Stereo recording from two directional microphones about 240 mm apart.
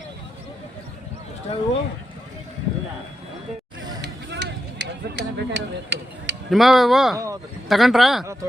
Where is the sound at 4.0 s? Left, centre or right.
Right.